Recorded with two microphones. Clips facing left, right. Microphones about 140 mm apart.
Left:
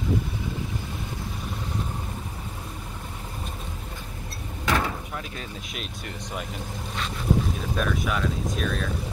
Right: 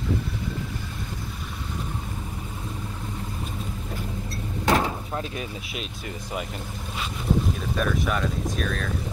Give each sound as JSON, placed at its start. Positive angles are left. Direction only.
{"t": 4.6, "sound": "door", "side_deg": -30}
{"t": 7.7, "sound": "speech", "side_deg": 0}